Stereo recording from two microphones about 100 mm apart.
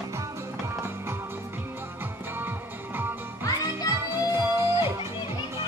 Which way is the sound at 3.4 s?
35° left (ahead or behind).